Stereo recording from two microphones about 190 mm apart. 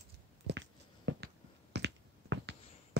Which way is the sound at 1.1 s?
70° right (ahead or behind).